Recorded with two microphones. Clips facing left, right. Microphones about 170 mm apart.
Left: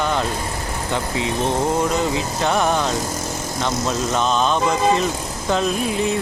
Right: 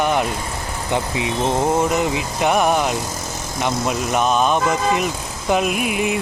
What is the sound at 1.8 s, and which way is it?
Speech, 20° right (ahead or behind).